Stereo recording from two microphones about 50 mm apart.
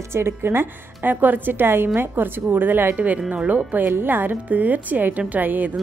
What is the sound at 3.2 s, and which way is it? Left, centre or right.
Speech, right.